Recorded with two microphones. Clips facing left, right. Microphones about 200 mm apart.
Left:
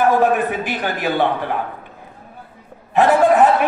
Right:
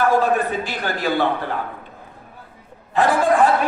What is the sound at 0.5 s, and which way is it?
Speech, 15° left (ahead or behind).